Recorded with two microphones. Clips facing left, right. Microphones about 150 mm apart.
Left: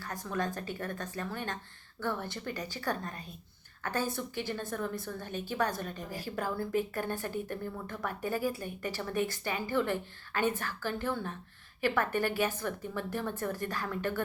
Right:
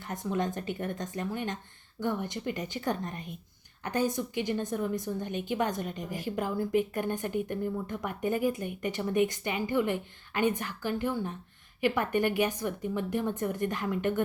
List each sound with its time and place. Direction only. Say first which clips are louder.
0.0 s a woman's voice: right 3 dB; 20° right (ahead or behind)